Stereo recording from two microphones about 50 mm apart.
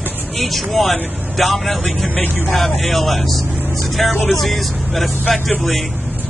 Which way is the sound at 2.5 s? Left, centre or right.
Centre.